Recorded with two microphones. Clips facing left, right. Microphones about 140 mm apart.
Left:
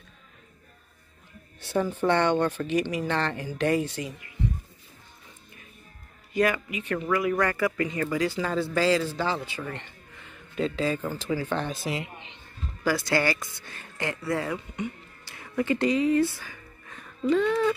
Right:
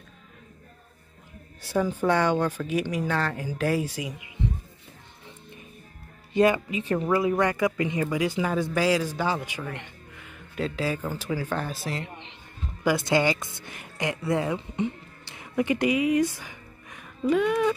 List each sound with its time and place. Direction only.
1.6 s speech: 10° right (ahead or behind)
6.3 s speech: 25° right (ahead or behind); by 12.4 s 5° left (ahead or behind)
12.8 s speech: 20° right (ahead or behind)